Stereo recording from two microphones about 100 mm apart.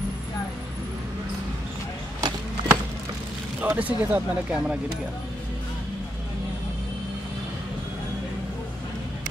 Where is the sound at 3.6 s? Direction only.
15° right (ahead or behind).